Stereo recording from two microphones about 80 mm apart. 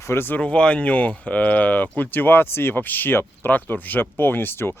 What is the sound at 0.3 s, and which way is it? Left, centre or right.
Speech, centre.